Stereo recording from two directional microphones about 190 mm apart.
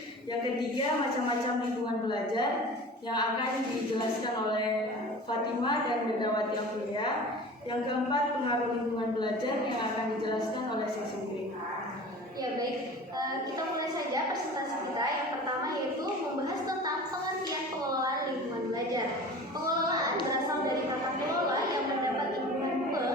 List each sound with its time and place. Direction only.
2.0 s speech: 25° left (ahead or behind)
7.7 s speech: 25° left (ahead or behind)